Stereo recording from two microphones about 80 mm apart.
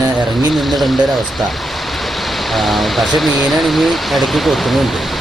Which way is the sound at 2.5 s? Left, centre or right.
Centre.